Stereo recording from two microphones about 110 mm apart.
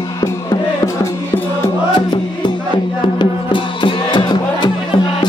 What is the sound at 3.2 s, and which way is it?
Music, 50° left (ahead or behind).